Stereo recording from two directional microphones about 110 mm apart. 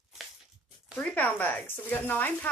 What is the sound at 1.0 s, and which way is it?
Speech, 15° left (ahead or behind).